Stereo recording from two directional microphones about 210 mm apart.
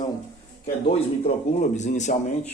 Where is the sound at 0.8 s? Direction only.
35° left (ahead or behind).